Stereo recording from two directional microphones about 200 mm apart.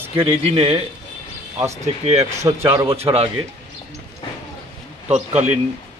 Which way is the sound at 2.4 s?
15° right (ahead or behind).